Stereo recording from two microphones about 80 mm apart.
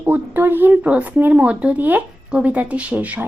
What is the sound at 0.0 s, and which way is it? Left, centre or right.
A woman's voice, right.